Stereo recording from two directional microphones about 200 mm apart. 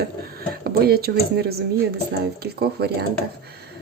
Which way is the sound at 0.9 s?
50° right (ahead or behind).